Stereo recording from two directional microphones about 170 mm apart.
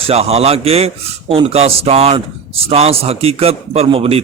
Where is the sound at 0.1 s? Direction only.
35° right (ahead or behind).